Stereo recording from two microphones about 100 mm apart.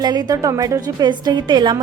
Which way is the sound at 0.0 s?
45° right (ahead or behind).